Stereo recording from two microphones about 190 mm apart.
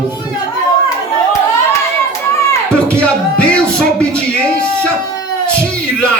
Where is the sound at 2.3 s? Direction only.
10° left (ahead or behind).